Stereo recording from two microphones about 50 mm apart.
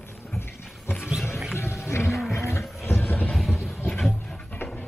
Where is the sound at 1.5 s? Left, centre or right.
Left.